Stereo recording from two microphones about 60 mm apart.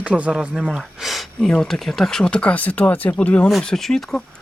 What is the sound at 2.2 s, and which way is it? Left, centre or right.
Speech, centre.